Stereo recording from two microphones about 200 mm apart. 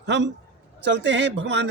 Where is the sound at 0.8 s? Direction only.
60° right (ahead or behind).